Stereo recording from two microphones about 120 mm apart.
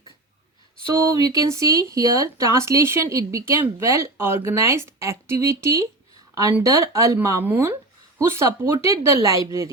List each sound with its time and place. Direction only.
1.1 s speech: 30° right (ahead or behind)